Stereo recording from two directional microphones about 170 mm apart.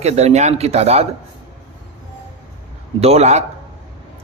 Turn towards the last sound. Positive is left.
turn(degrees=-40)  # may be behind; listen again after turning